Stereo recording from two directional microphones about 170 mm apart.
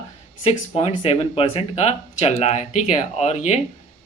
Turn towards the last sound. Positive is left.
turn(degrees=40)  # may be behind; listen again after turning